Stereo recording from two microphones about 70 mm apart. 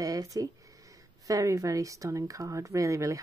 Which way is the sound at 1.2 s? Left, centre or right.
Right.